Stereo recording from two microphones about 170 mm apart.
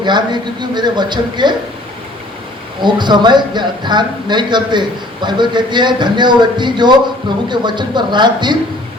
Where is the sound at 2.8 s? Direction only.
25° right (ahead or behind).